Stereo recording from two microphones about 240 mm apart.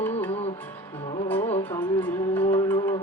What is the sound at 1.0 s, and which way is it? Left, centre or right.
Music, left.